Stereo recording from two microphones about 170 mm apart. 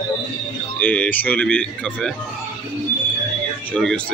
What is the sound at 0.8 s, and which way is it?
Speech, 10° left (ahead or behind).